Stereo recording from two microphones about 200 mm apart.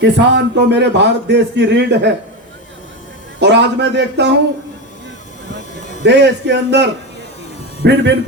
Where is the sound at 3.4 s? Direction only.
60° right (ahead or behind).